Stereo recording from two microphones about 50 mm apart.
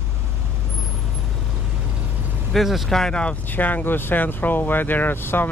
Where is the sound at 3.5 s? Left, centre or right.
Left.